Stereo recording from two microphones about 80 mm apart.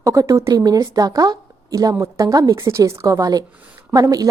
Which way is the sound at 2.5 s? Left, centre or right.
Right.